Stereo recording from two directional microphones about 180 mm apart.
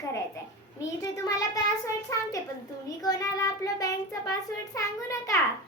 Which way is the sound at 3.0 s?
20° left (ahead or behind).